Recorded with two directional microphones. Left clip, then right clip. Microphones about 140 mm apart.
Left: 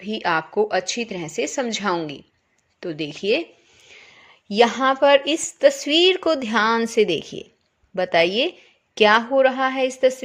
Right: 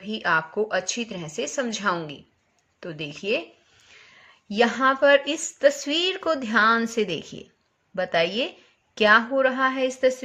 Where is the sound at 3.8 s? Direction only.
45° left (ahead or behind).